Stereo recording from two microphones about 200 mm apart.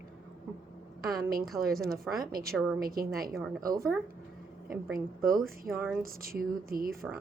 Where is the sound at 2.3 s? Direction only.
45° right (ahead or behind).